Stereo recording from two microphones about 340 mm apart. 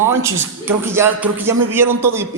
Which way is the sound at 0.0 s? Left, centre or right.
Centre.